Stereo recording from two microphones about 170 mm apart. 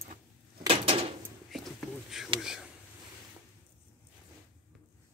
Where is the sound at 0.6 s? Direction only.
35° right (ahead or behind).